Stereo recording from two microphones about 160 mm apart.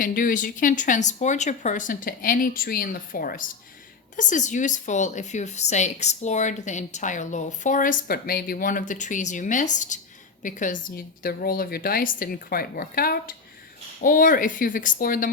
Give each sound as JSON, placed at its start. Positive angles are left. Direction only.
{"t": 0.0, "sound": "speech", "side_deg": 60}
{"t": 4.2, "sound": "a woman's voice", "side_deg": 50}
{"t": 14.0, "sound": "speech", "side_deg": 55}